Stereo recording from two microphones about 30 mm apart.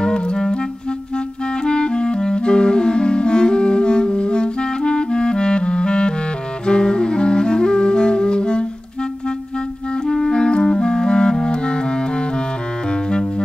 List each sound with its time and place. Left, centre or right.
0.0 s clarinet: left
1.6 s clarinet: left
6.6 s music: left
10.0 s clarinet: centre
10.3 s clarinet: left
12.9 s music: left